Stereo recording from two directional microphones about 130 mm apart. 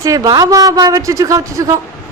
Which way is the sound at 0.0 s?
30° right (ahead or behind).